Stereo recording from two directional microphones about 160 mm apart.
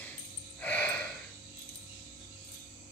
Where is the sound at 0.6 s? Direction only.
10° left (ahead or behind).